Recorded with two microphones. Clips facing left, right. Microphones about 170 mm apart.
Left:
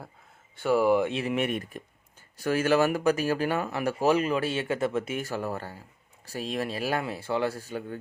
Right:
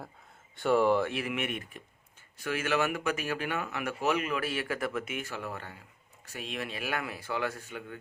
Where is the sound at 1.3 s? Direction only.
40° left (ahead or behind).